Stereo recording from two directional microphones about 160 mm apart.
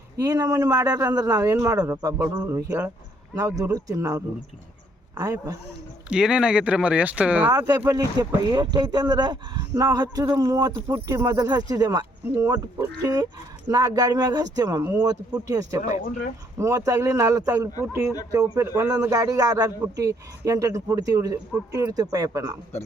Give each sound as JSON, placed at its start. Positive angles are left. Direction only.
{"t": 0.2, "sound": "speech", "side_deg": -20}
{"t": 6.1, "sound": "speech", "side_deg": -5}
{"t": 7.5, "sound": "speech", "side_deg": -20}
{"t": 13.7, "sound": "speech", "side_deg": -25}